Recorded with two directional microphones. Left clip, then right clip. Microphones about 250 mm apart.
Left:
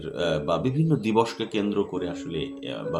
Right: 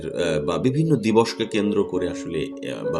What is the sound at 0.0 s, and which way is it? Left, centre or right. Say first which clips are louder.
Speech: right 3 dB; right.